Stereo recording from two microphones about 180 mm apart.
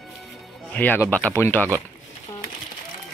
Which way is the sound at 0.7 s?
10° left (ahead or behind).